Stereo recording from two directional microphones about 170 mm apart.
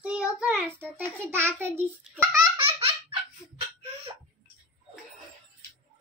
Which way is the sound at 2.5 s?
35° right (ahead or behind).